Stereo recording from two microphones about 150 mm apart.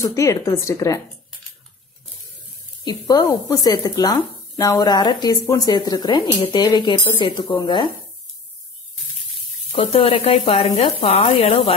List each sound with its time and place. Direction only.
0.0 s speech: 20° left (ahead or behind)
2.8 s speech: 25° left (ahead or behind)
9.8 s speech: 40° left (ahead or behind)